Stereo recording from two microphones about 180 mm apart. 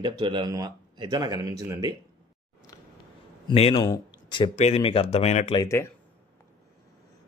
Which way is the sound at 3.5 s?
35° left (ahead or behind).